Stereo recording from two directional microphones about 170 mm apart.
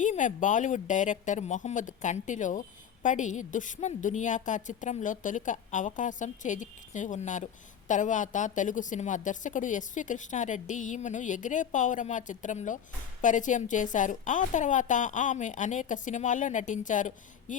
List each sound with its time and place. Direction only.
0.0 s speech: 50° left (ahead or behind)